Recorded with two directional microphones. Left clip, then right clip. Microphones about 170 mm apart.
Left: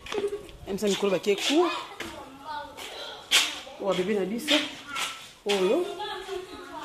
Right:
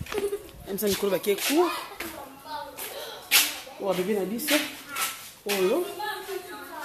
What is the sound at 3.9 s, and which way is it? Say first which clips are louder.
Speech: even; 5° right (ahead or behind).